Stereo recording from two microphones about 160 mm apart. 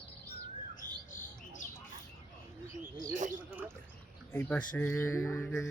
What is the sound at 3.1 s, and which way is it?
Bird, 50° right (ahead or behind).